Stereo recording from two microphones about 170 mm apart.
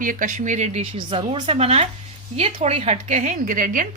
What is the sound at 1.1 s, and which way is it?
A woman's voice, 30° right (ahead or behind).